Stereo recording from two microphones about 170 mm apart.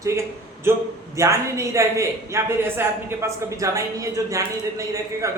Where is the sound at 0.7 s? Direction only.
15° right (ahead or behind).